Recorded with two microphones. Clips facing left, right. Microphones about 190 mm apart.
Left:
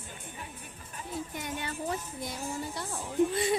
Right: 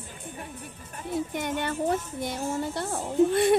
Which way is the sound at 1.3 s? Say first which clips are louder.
Right 8 dB; 65° right (ahead or behind).